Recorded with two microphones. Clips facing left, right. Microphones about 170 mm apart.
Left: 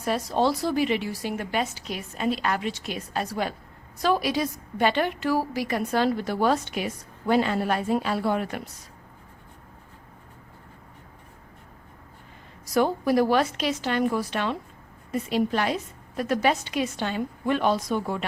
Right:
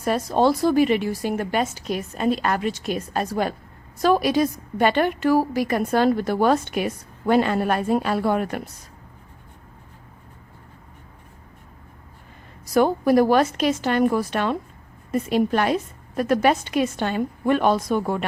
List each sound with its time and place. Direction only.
0.0 s a woman's voice: 50° right (ahead or behind)
12.7 s a woman's voice: 50° right (ahead or behind)